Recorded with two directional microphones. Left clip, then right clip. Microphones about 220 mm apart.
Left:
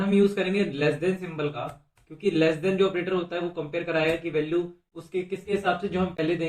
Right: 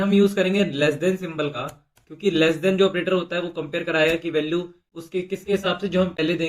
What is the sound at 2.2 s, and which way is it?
Speech, 45° right (ahead or behind).